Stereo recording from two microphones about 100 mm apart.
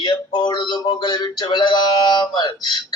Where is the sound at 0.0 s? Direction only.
50° left (ahead or behind).